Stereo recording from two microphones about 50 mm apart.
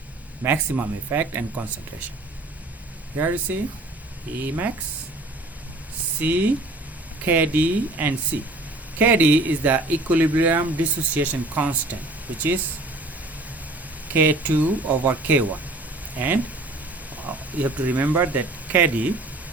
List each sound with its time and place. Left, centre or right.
0.4 s speech: right
3.2 s speech: right
6.1 s speech: right
14.1 s speech: right